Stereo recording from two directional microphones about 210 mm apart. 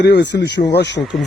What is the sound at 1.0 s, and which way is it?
Speech, centre (ahead or behind).